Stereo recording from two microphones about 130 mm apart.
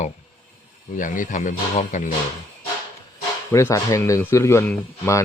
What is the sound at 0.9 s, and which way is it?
Speech, 90° left.